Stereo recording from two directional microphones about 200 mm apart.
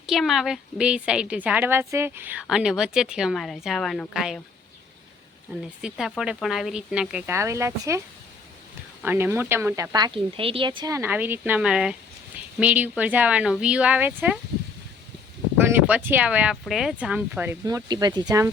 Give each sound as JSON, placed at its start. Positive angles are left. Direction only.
{"t": 0.0, "sound": "a woman's voice", "side_deg": 0}
{"t": 5.5, "sound": "a woman's voice", "side_deg": 0}
{"t": 15.5, "sound": "a sound", "side_deg": -10}
{"t": 16.0, "sound": "speech", "side_deg": -10}